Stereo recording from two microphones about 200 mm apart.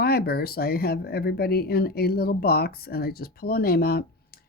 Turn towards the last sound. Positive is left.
turn(degrees=50)  # may be behind; listen again after turning